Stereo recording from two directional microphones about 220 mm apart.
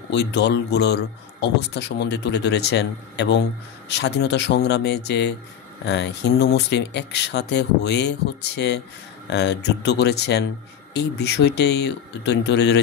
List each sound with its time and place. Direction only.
0.1 s speech: 50° left (ahead or behind)